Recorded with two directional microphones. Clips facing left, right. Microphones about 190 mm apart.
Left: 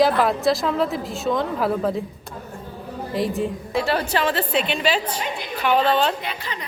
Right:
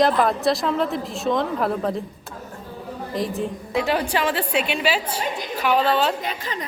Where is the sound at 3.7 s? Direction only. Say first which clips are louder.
Right 1 dB; 15° right (ahead or behind).